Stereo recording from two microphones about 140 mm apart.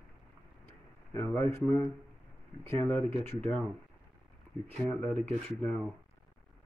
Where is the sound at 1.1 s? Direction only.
15° left (ahead or behind).